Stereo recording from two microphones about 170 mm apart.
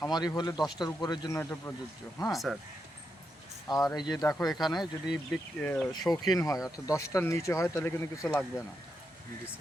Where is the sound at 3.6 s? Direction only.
25° left (ahead or behind).